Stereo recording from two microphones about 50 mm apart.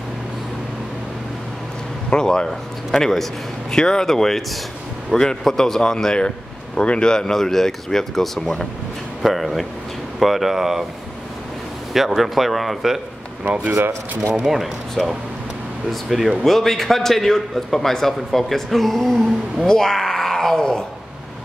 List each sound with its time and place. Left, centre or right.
2.0 s a man's voice: centre
11.9 s a man's voice: centre
13.4 s speech: right
14.4 s a man's voice: centre